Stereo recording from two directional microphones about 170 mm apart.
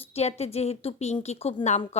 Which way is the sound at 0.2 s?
40° left (ahead or behind).